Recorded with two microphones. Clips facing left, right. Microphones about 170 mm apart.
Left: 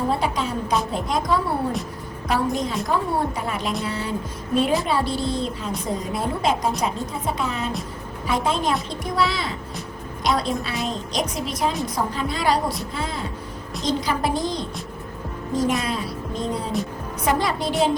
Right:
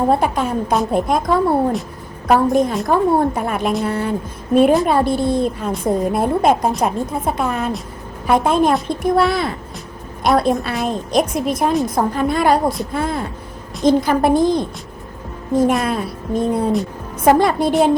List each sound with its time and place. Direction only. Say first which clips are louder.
0.1 s a woman's voice: right 7 dB; 55° right (ahead or behind)